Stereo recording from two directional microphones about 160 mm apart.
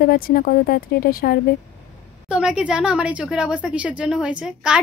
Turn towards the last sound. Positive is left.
turn(degrees=-5)  # may be behind; listen again after turning